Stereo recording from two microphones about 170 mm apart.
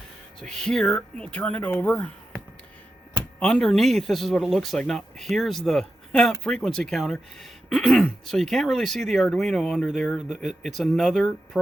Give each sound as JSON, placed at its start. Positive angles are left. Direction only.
{"t": 0.3, "sound": "speech", "side_deg": 5}
{"t": 3.4, "sound": "speech", "side_deg": 5}